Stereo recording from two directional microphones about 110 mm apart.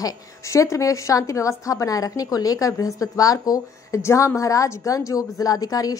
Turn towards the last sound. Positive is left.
turn(degrees=35)  # may be behind; listen again after turning